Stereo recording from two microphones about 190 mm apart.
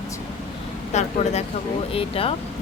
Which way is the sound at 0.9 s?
35° left (ahead or behind).